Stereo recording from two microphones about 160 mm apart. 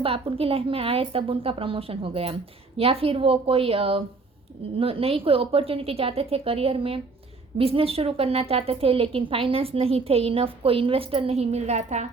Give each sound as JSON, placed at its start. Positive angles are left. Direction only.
{"t": 0.0, "sound": "a woman's voice", "side_deg": -35}